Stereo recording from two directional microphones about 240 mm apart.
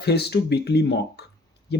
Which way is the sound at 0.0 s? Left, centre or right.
Left.